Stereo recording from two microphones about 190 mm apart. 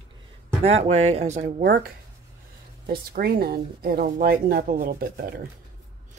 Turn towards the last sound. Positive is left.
turn(degrees=-50)  # may be behind; listen again after turning